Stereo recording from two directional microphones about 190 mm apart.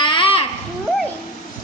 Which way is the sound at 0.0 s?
25° left (ahead or behind).